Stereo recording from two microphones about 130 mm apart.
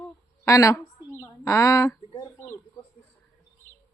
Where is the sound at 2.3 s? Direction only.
20° left (ahead or behind).